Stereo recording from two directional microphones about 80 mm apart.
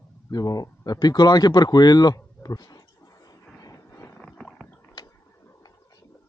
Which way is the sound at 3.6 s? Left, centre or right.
Left.